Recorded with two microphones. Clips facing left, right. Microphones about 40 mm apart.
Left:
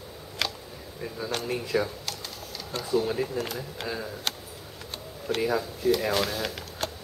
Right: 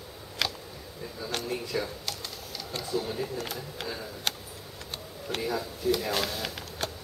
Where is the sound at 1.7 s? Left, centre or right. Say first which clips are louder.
Left 6 dB; left.